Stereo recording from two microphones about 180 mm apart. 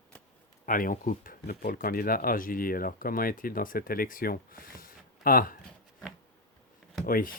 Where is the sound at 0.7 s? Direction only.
50° left (ahead or behind).